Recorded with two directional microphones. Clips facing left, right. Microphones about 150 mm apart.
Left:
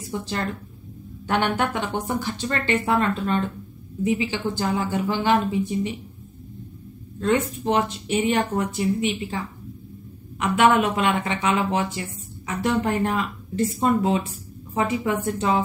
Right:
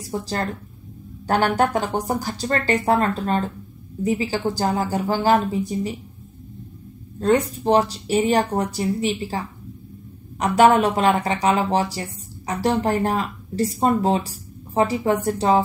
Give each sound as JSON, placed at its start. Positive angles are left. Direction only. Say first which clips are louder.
{"t": 0.0, "sound": "a woman's voice", "louder": "right 2 dB", "side_deg": -35}
{"t": 7.2, "sound": "a woman's voice", "louder": "right 3 dB", "side_deg": -35}
{"t": 10.4, "sound": "a woman's voice", "louder": "right 3 dB", "side_deg": -40}